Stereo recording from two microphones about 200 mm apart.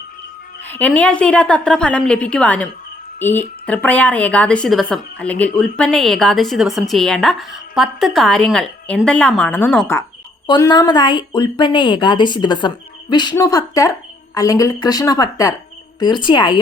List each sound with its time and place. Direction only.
0.7 s speech: 5° left (ahead or behind)
10.4 s a woman's voice: 20° left (ahead or behind)